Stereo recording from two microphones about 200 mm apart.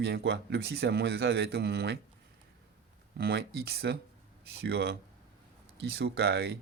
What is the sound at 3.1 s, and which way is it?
A man's voice, 50° right (ahead or behind).